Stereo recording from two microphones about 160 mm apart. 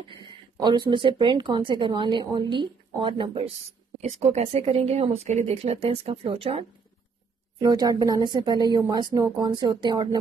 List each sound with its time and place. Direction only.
0.1 s speech: 30° right (ahead or behind)
7.6 s speech: 25° right (ahead or behind)